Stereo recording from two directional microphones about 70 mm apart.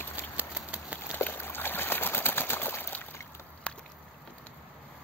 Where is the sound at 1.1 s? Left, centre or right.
Left.